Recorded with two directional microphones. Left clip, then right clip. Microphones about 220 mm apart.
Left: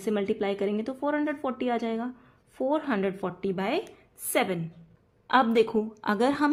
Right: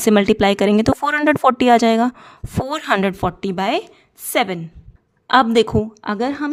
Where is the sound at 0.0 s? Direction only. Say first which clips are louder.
Right 14 dB; 45° right (ahead or behind).